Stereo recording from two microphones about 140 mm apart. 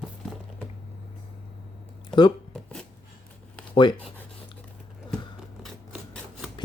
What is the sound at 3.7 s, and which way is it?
Speech, 35° left (ahead or behind).